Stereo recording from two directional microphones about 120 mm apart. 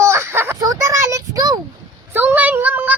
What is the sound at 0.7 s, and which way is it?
Child singing, 25° right (ahead or behind).